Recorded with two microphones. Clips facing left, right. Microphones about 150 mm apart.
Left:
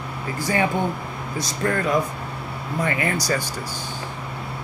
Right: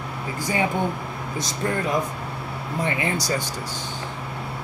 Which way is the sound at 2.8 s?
20° right (ahead or behind).